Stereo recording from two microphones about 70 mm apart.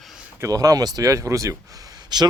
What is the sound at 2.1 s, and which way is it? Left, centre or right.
Speech, right.